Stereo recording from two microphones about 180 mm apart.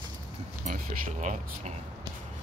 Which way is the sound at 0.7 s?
45° right (ahead or behind).